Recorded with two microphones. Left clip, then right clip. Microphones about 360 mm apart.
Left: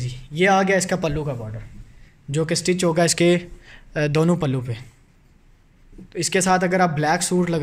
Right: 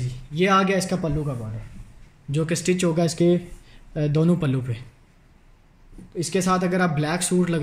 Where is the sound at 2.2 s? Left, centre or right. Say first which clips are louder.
Left 2 dB; centre.